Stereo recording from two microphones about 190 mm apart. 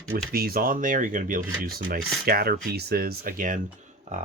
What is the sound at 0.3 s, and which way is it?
Speech, 55° right (ahead or behind).